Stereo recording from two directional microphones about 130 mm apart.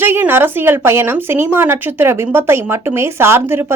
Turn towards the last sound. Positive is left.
turn(degrees=-15)  # may be behind; listen again after turning